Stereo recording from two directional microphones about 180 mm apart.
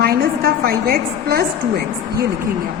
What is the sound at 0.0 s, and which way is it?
A woman's voice, 60° right (ahead or behind).